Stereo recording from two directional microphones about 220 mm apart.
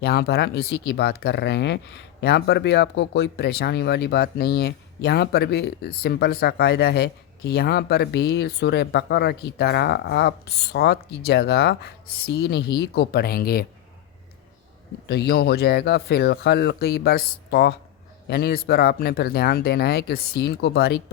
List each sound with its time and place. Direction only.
0.0 s speech: 45° left (ahead or behind)
15.0 s speech: 50° left (ahead or behind)